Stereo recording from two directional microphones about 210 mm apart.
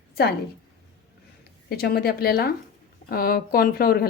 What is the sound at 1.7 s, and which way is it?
Speech, 50° left (ahead or behind).